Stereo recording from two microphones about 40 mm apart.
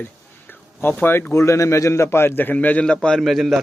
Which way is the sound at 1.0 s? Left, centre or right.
Left.